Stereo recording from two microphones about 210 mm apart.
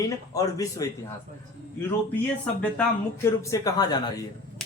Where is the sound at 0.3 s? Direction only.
15° left (ahead or behind).